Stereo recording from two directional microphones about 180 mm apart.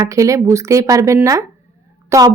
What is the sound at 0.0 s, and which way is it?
A woman's voice, 15° right (ahead or behind).